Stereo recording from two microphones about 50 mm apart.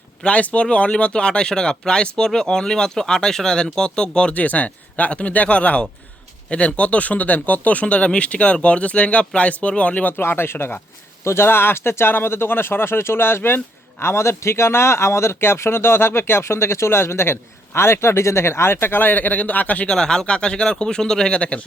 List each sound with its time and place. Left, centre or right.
0.3 s speech: left
4.4 s speech: left
10.2 s speech: left
14.0 s speech: left
20.0 s speech: centre